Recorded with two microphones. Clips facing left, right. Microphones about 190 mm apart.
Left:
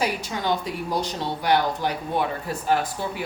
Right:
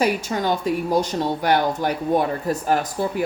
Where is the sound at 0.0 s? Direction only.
45° right (ahead or behind).